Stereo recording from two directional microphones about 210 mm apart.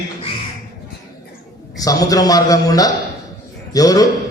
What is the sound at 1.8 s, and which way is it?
A man's voice, 15° left (ahead or behind).